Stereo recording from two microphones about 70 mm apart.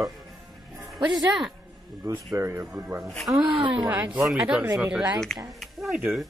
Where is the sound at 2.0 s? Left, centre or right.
Right.